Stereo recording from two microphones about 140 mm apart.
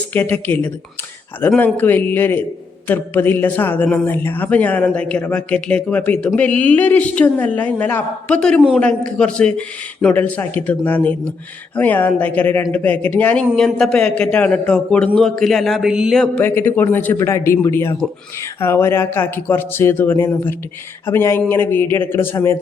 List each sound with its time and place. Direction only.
0.1 s a man's voice: 10° left (ahead or behind)